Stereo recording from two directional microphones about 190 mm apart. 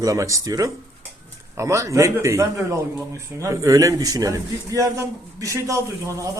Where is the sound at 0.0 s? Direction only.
15° right (ahead or behind).